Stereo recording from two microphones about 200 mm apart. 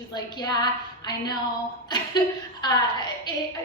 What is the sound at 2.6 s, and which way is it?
Speech, 20° left (ahead or behind).